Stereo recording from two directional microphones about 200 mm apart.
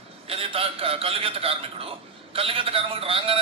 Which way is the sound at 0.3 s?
30° right (ahead or behind).